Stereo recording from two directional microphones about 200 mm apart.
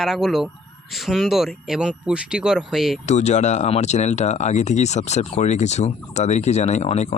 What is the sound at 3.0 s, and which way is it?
Speech, 35° left (ahead or behind).